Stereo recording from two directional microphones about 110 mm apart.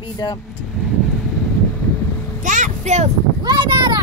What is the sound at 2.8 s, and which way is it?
Speech, 90° right.